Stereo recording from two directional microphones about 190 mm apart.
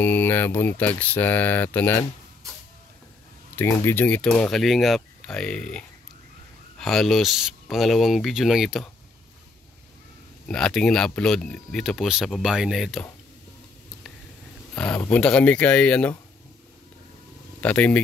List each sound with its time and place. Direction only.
0.0 s speech: 10° left (ahead or behind)
3.5 s speech: 10° left (ahead or behind)
10.5 s speech: 5° left (ahead or behind)
14.8 s speech: 5° left (ahead or behind)
17.6 s speech: 5° left (ahead or behind)